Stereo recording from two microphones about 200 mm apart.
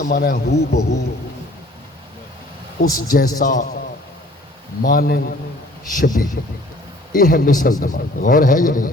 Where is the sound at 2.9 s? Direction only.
45° left (ahead or behind).